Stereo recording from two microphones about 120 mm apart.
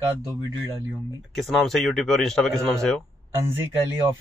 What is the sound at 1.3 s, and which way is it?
A man's voice, centre (ahead or behind).